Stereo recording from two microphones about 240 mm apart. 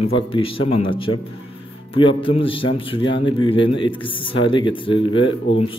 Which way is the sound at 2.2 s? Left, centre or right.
Left.